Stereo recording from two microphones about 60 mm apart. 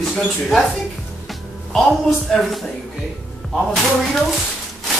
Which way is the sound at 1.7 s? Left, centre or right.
Centre.